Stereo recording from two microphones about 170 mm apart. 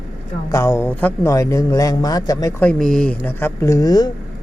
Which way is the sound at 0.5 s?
15° left (ahead or behind).